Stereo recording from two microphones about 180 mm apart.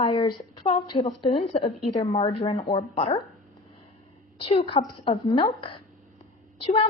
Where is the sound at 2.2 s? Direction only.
20° left (ahead or behind).